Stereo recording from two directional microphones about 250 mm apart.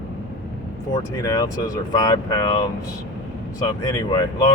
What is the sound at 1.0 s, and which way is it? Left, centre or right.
Speech, centre.